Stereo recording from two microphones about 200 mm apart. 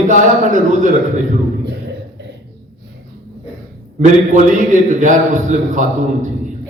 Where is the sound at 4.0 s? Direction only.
40° right (ahead or behind).